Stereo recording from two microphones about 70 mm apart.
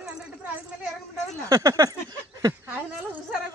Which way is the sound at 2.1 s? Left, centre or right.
Right.